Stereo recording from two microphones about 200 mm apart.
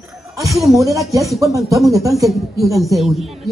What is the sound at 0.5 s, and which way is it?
Speech, centre (ahead or behind).